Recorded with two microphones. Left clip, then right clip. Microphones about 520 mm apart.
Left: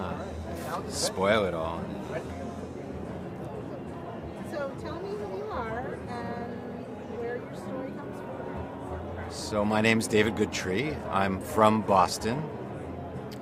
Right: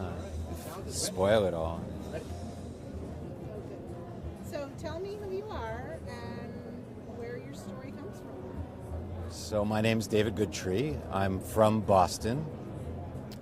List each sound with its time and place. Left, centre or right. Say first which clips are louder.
0.9 s speech: left 1 dB; right
9.5 s speech: left 4 dB; right